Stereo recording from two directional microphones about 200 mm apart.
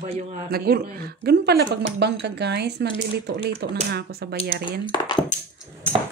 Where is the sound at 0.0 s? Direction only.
35° right (ahead or behind); by 2.9 s 55° right (ahead or behind).